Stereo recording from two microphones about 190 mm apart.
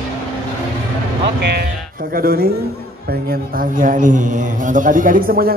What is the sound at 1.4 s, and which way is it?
A man's voice, 60° right (ahead or behind).